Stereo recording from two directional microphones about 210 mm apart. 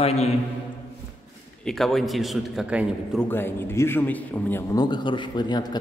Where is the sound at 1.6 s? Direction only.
Centre (ahead or behind).